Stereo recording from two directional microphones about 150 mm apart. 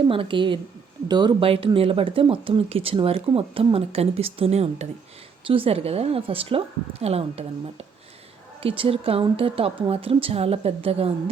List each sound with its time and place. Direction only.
0.0 s a woman's voice: 35° right (ahead or behind)
8.6 s speech: 40° right (ahead or behind)